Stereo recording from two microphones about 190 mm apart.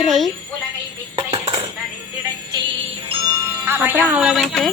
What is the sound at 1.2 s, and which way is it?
Dishes, 25° right (ahead or behind).